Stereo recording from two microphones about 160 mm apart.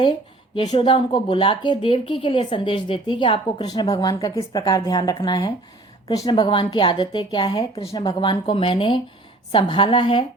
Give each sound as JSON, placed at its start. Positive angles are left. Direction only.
{"t": 0.0, "sound": "speech", "side_deg": 30}